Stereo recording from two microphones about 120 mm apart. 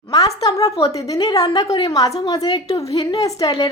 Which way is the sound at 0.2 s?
30° left (ahead or behind).